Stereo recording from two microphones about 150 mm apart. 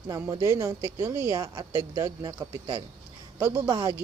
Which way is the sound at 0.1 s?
25° right (ahead or behind).